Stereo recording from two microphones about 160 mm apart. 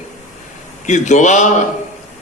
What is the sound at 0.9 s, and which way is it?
Speech, 50° left (ahead or behind).